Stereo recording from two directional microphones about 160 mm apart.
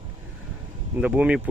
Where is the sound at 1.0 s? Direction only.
10° right (ahead or behind).